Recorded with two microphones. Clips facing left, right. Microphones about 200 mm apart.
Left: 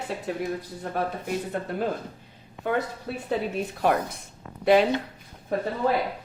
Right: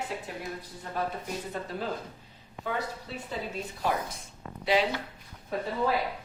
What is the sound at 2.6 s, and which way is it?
Speech, 60° left (ahead or behind).